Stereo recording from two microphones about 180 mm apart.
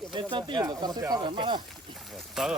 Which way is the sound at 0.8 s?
25° right (ahead or behind).